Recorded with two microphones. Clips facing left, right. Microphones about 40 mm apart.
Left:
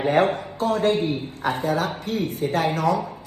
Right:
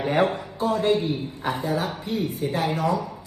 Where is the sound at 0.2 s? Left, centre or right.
Left.